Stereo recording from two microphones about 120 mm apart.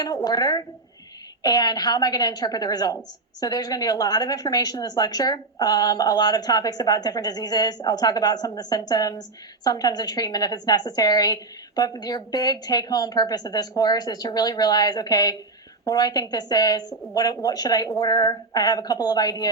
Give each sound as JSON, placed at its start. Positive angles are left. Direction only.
{"t": 0.0, "sound": "a woman's voice", "side_deg": 30}